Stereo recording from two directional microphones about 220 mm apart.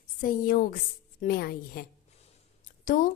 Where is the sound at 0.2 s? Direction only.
40° left (ahead or behind).